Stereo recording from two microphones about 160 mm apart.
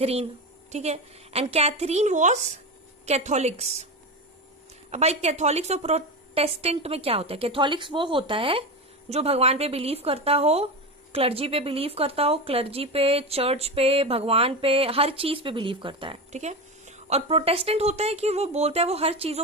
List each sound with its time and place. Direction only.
0.0 s a woman's voice: 40° right (ahead or behind)
4.9 s a woman's voice: 45° right (ahead or behind)